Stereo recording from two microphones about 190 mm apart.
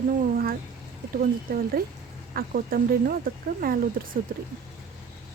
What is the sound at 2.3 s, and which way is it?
Speech, 50° right (ahead or behind).